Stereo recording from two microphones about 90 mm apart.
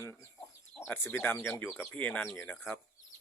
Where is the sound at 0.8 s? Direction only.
25° left (ahead or behind).